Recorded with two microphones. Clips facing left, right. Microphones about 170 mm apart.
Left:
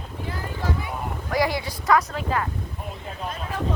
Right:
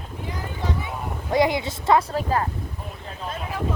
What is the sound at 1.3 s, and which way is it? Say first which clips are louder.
A woman's voice: right 4 dB; 20° right (ahead or behind).